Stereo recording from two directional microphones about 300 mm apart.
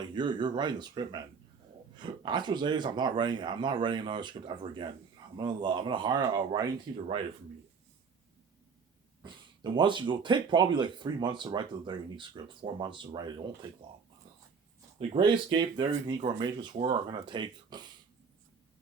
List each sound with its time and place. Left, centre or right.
0.1 s speech: centre
9.7 s speech: centre
14.9 s speech: centre